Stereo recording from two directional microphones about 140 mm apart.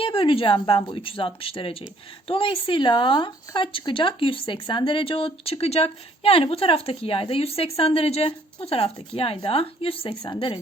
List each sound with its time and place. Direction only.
0.0 s a woman's voice: 40° left (ahead or behind)